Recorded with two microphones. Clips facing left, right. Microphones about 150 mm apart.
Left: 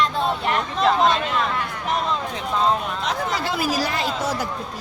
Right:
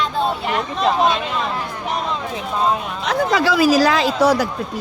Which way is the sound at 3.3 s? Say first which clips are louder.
Right 13 dB; 90° right.